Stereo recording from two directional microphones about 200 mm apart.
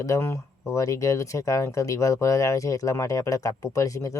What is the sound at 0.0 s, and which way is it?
Speech, 15° left (ahead or behind).